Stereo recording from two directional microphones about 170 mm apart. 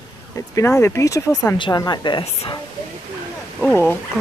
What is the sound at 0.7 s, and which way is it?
Speech, 15° left (ahead or behind).